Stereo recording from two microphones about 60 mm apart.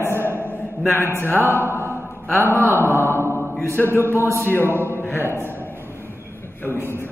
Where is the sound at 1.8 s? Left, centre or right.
Left.